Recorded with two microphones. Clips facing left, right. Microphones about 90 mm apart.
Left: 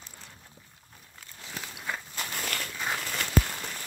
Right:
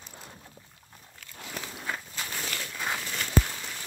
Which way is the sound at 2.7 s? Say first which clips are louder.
Right 1 dB; centre (ahead or behind).